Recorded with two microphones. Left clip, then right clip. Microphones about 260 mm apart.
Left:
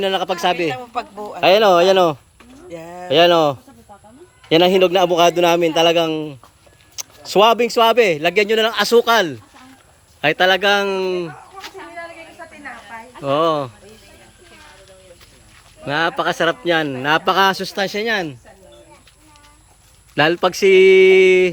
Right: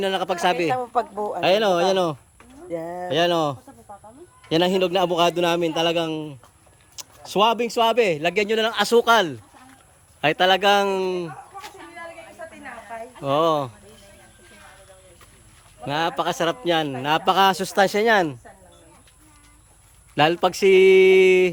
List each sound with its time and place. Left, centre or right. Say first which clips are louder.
0.0 s speech: left 3 dB; centre
0.8 s speech: right 3 dB; right
1.4 s a man's voice: left 7 dB; centre
2.6 s a sound: right 3 dB; right
3.1 s a man's voice: left 8 dB; centre
12.9 s speech: left 3 dB; centre
15.9 s a man's voice: left 5 dB; centre
20.1 s speech: left 3 dB; centre